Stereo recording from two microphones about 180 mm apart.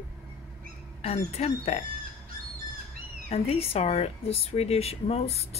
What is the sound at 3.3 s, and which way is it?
Speech, 35° left (ahead or behind).